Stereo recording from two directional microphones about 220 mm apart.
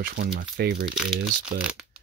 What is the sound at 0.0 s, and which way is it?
Speech, 40° right (ahead or behind).